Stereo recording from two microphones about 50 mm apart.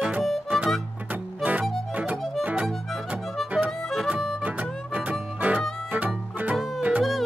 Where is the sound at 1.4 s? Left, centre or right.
Right.